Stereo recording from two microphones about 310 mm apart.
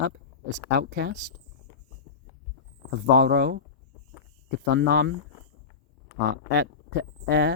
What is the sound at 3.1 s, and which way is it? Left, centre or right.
Speech, right.